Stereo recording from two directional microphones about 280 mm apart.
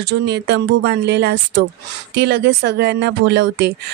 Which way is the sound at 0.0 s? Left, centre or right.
Right.